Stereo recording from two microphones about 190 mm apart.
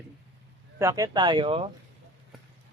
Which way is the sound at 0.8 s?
15° right (ahead or behind).